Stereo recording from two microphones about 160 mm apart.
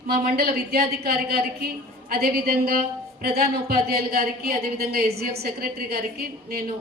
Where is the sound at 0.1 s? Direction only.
70° right (ahead or behind).